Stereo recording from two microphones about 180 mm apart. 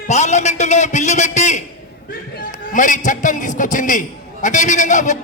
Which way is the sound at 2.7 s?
45° left (ahead or behind).